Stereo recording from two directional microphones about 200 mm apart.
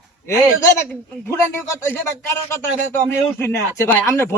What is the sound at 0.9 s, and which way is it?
Speech, 10° left (ahead or behind).